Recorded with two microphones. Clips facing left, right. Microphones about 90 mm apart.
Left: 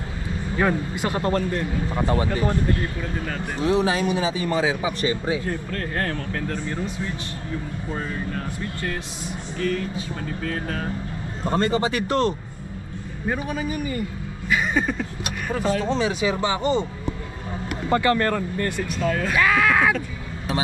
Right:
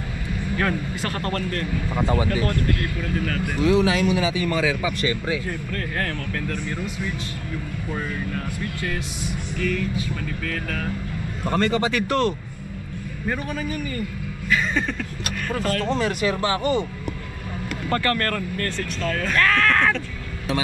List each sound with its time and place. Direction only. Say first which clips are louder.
0.6 s speech: left 4 dB; 15° left (ahead or behind)
2.0 s speech: right 1 dB; centre (ahead or behind)
2.4 s a man's voice: left 1 dB; 15° left (ahead or behind)
3.6 s a man's voice: right 2 dB; 30° left (ahead or behind)
5.7 s speech: left 1 dB; 10° left (ahead or behind)
6.4 s a man's voice: left 1 dB; 25° left (ahead or behind)
10.5 s a man's voice: even; 25° left (ahead or behind)
13.3 s speech: left 1 dB; 5° left (ahead or behind)
17.8 s speech: left 3 dB; 15° left (ahead or behind)